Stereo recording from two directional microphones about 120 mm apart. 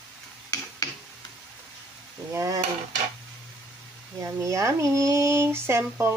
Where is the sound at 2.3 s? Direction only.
30° right (ahead or behind).